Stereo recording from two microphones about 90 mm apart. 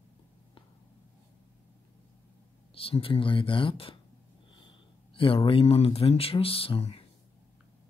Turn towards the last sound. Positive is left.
turn(degrees=90)